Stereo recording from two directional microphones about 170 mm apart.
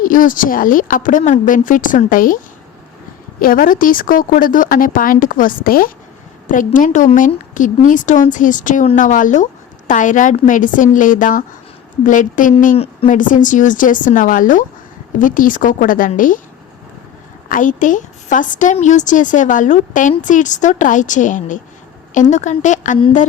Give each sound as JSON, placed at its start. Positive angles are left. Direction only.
{"t": 0.0, "sound": "a woman's voice", "side_deg": 55}
{"t": 3.4, "sound": "a woman's voice", "side_deg": 55}
{"t": 12.7, "sound": "a woman's voice", "side_deg": 35}
{"t": 13.1, "sound": "a woman's voice", "side_deg": 50}
{"t": 17.5, "sound": "a woman's voice", "side_deg": 50}